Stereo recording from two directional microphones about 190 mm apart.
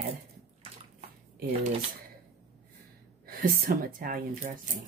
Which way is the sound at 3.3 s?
50° right (ahead or behind).